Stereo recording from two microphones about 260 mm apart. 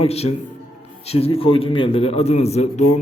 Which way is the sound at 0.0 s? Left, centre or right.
Left.